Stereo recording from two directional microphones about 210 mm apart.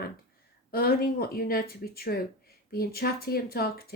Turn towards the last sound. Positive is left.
turn(degrees=45)  # may be behind; listen again after turning